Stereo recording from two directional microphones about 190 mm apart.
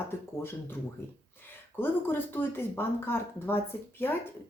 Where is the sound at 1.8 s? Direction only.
10° left (ahead or behind).